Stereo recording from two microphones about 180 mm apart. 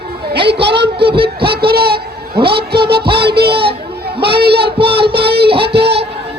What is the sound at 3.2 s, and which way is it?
Speech, 65° right (ahead or behind).